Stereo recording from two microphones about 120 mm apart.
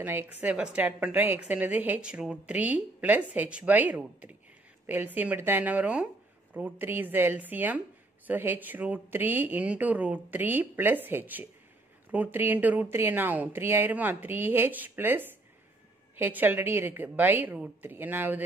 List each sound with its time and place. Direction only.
0.0 s speech: 20° right (ahead or behind)